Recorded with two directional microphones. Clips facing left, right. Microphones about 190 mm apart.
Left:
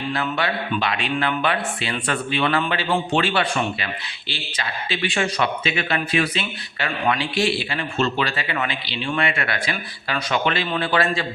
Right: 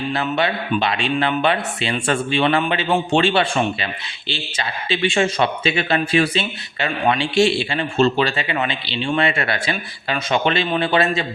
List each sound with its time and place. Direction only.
0.1 s speech: 25° right (ahead or behind)